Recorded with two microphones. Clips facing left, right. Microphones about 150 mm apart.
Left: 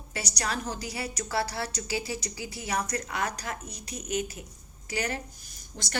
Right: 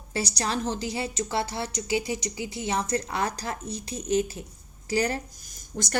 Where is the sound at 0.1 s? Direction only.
30° right (ahead or behind).